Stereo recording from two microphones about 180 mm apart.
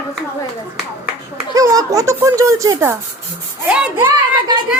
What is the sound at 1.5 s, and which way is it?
A child's voice, 20° right (ahead or behind).